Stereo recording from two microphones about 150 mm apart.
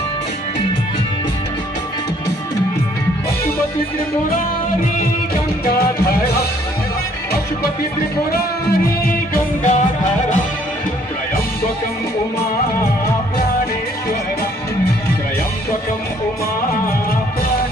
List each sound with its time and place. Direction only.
9.6 s music: 50° left (ahead or behind)